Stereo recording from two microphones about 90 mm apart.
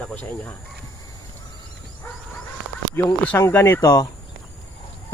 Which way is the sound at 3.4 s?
30° left (ahead or behind).